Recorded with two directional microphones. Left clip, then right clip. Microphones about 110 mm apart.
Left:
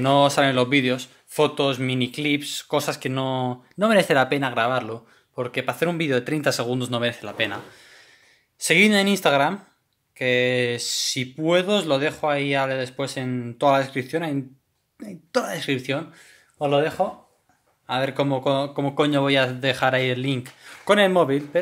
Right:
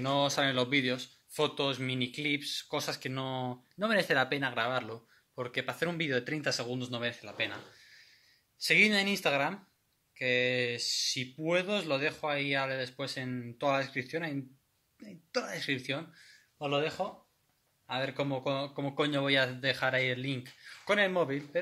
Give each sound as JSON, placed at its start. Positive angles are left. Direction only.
{"t": 0.0, "sound": "speech", "side_deg": 35}
{"t": 2.3, "sound": "speech", "side_deg": 30}
{"t": 6.5, "sound": "a man's voice", "side_deg": 40}